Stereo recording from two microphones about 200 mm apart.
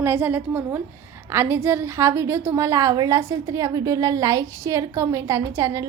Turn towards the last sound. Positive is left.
turn(degrees=-15)  # may be behind; listen again after turning